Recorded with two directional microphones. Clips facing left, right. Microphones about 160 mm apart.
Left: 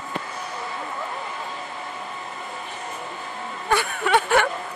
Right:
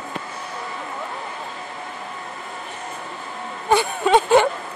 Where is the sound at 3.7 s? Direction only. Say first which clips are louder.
Right 4 dB; 20° right (ahead or behind).